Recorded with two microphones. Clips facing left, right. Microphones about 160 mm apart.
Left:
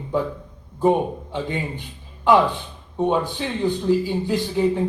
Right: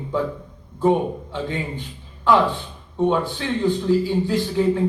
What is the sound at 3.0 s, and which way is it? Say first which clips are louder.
A man's voice: right 1 dB; 15° left (ahead or behind).